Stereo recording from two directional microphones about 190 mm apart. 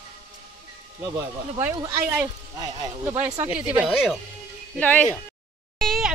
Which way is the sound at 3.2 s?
10° right (ahead or behind).